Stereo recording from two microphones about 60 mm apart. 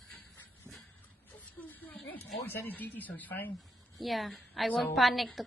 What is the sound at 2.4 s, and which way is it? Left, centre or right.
A child's voice, left.